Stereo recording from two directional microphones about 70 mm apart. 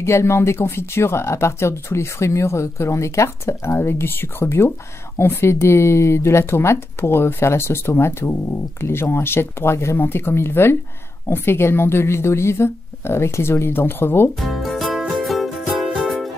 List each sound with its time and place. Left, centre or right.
0.0 s speech: left
14.4 s music: centre